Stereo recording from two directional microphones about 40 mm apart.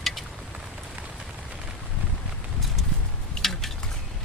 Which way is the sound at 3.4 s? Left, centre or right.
Centre.